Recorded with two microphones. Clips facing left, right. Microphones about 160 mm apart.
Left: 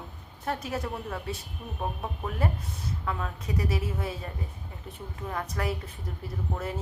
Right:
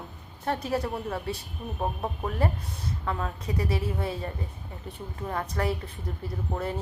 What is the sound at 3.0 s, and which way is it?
A woman's voice, 30° right (ahead or behind).